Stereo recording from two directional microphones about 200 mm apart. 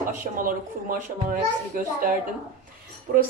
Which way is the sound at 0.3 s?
45° right (ahead or behind).